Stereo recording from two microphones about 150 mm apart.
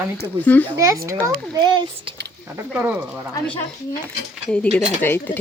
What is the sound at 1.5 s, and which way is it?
Speech, 30° right (ahead or behind).